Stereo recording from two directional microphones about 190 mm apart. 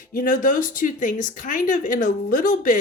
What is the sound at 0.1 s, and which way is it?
Speech, 50° left (ahead or behind).